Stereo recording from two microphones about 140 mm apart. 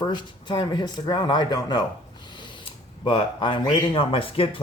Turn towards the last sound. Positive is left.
turn(degrees=40)  # may be behind; listen again after turning